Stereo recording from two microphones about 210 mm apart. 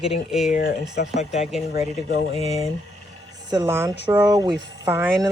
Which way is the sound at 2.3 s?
30° left (ahead or behind).